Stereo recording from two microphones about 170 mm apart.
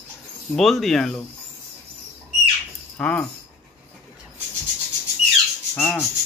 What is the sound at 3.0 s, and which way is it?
Speech, 5° left (ahead or behind).